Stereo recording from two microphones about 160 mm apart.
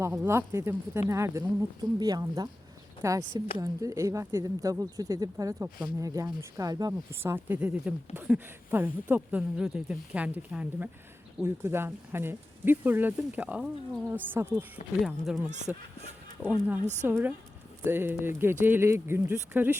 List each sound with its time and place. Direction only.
0.0 s speech: 15° right (ahead or behind)
15.0 s speech: centre (ahead or behind)